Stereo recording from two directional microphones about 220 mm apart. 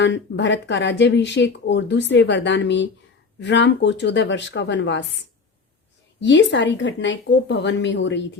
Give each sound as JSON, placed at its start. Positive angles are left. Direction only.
{"t": 0.0, "sound": "speech", "side_deg": 55}
{"t": 6.1, "sound": "speech", "side_deg": 55}